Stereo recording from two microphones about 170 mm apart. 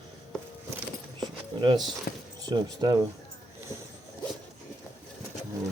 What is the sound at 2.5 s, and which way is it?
Speech, 25° right (ahead or behind).